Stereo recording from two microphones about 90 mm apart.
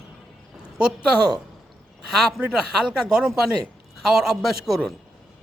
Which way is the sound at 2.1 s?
5° right (ahead or behind).